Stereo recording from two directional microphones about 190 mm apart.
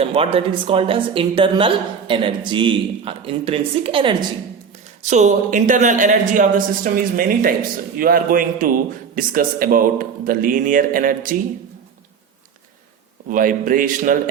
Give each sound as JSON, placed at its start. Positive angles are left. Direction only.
{"t": 0.0, "sound": "a woman's voice", "side_deg": -30}
{"t": 5.0, "sound": "a man's voice", "side_deg": -40}
{"t": 13.2, "sound": "a man's voice", "side_deg": -45}